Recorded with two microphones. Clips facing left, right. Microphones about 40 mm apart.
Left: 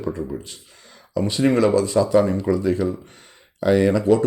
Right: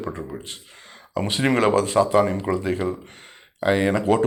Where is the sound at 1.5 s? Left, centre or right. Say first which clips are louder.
Right 1 dB; right.